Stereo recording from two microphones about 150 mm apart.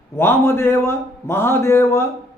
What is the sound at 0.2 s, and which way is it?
Speech, 15° left (ahead or behind).